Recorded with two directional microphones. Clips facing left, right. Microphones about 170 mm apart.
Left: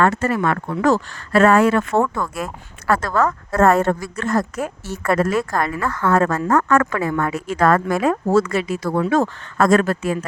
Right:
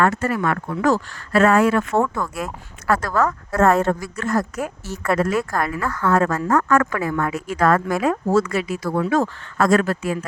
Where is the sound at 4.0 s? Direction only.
30° left (ahead or behind).